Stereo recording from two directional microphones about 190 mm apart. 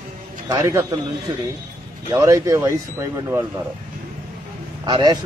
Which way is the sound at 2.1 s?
15° right (ahead or behind).